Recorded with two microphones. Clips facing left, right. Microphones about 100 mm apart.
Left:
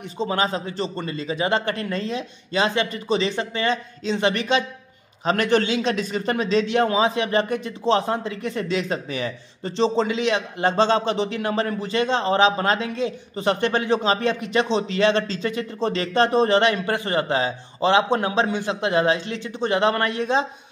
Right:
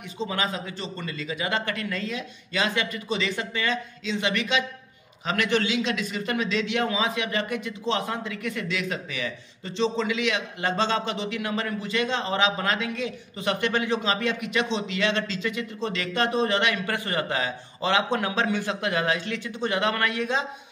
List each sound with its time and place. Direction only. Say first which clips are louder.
0.2 s a man's voice: left 5 dB; 35° left (ahead or behind)